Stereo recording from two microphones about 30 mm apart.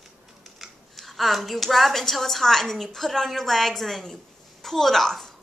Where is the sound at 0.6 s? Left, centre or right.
Centre.